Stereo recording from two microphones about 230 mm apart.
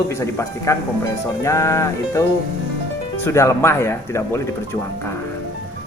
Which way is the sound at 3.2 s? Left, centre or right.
Centre.